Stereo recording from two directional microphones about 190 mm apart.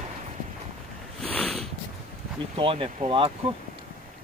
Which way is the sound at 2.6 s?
30° right (ahead or behind).